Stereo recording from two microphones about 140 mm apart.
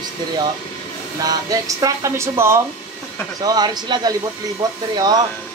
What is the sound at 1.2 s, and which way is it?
Speech, 25° right (ahead or behind).